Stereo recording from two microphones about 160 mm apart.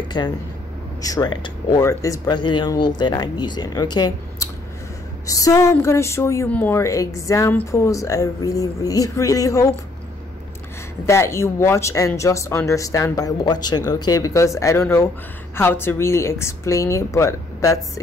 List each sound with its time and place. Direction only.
0.2 s speech: 25° left (ahead or behind)
11.1 s a woman's voice: 15° left (ahead or behind)